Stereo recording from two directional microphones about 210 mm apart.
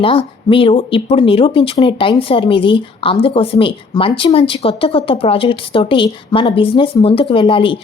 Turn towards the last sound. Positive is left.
turn(degrees=25)  # may be behind; listen again after turning